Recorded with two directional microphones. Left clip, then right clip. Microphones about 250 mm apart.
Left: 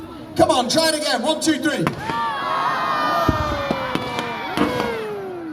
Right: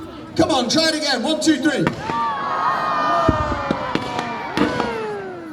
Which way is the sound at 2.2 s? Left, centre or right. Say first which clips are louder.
Right 1 dB; left.